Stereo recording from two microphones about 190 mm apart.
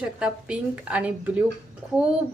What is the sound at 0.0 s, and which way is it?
A woman's voice, 5° right (ahead or behind).